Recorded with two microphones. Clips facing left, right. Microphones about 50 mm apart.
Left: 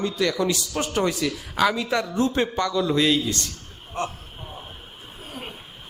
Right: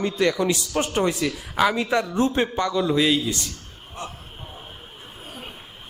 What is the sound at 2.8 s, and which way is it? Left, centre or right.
Speech, centre.